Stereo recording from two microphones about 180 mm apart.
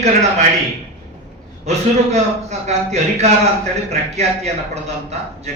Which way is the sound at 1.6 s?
35° right (ahead or behind).